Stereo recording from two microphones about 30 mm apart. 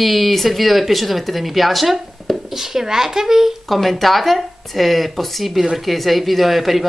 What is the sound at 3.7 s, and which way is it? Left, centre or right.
Speech, centre.